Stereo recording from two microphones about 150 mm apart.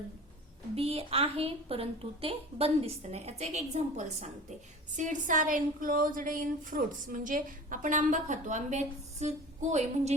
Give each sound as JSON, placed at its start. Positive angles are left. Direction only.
{"t": 0.8, "sound": "a woman's voice", "side_deg": -40}